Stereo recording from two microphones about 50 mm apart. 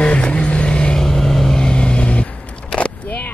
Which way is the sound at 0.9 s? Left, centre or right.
Centre.